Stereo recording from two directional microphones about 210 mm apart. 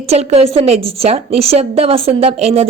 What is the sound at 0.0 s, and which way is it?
A woman's voice, 30° right (ahead or behind).